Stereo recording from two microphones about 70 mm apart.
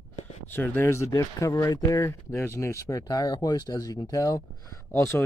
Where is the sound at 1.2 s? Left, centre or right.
Left.